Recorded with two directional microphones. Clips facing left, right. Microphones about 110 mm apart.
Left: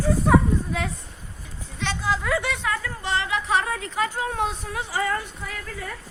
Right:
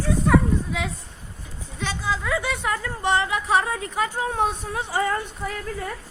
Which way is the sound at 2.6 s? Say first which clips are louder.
Right 3 dB; 25° right (ahead or behind).